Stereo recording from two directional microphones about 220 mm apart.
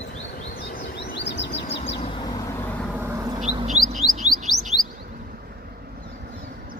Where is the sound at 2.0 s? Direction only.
20° left (ahead or behind).